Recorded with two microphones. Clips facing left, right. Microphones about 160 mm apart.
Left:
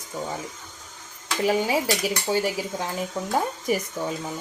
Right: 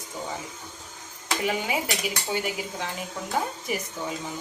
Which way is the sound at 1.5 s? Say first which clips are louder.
Left 7 dB; 35° left (ahead or behind).